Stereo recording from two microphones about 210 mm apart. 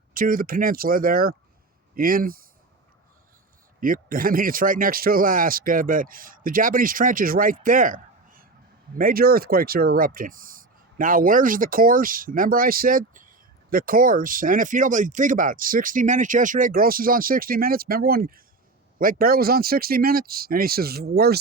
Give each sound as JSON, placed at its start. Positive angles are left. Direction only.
{"t": 0.1, "sound": "speech", "side_deg": -40}
{"t": 3.8, "sound": "speech", "side_deg": -40}